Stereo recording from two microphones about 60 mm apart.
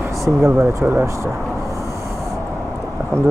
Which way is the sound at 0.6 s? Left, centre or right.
Right.